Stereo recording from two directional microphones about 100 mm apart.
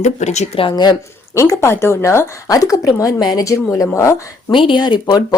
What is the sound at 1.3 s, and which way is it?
Speech, 30° left (ahead or behind).